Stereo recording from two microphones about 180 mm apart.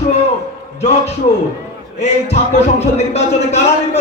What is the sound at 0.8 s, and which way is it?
Speech, 35° left (ahead or behind).